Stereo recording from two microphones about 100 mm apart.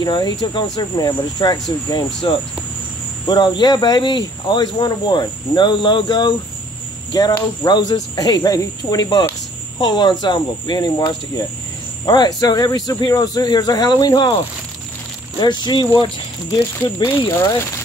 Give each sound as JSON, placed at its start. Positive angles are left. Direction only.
{"t": 0.0, "sound": "cricket", "side_deg": 45}
{"t": 3.3, "sound": "cricket", "side_deg": 45}
{"t": 15.3, "sound": "cricket", "side_deg": 45}
{"t": 16.7, "sound": "speech", "side_deg": 25}